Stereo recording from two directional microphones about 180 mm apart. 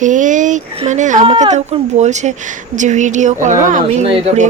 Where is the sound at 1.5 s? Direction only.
40° right (ahead or behind).